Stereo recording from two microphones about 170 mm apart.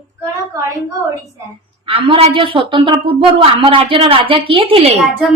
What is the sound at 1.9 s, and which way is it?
A woman's voice, 30° right (ahead or behind).